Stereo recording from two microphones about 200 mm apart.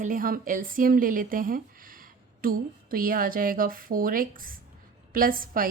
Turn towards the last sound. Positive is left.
turn(degrees=-45)  # may be behind; listen again after turning